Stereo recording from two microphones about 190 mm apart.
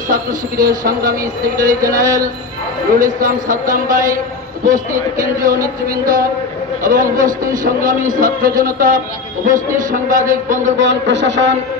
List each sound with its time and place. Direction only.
0.1 s a man's voice: 45° right (ahead or behind)
10.8 s speech: 75° right (ahead or behind)